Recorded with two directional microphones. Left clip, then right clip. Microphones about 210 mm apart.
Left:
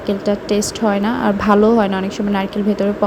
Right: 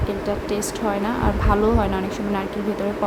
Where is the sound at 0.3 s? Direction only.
25° left (ahead or behind).